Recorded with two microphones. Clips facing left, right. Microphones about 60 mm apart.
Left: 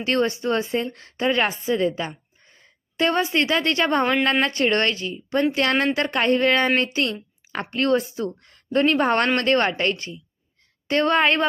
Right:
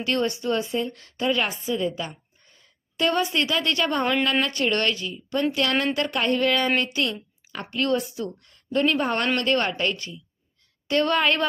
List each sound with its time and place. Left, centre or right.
0.0 s speech: left
1.7 s a woman's voice: left
2.4 s a woman's voice: left
7.7 s a woman's voice: left